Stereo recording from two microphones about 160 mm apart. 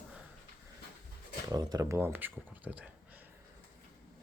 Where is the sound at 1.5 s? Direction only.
25° right (ahead or behind); by 3.3 s 10° right (ahead or behind).